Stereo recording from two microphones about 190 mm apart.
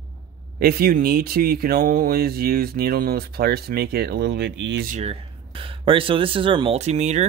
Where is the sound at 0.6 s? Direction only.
50° right (ahead or behind).